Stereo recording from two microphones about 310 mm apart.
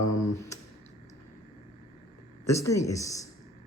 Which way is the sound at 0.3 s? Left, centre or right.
Centre.